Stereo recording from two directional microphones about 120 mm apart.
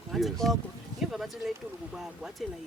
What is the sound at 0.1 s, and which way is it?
Speech, centre (ahead or behind).